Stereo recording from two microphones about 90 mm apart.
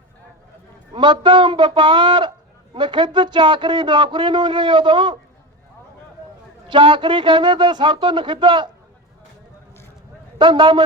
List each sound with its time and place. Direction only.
0.9 s speech: 60° right (ahead or behind)
6.7 s speech: 65° right (ahead or behind)
10.3 s speech: 60° right (ahead or behind)